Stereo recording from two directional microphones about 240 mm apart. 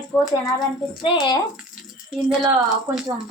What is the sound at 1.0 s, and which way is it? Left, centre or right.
Speech, centre.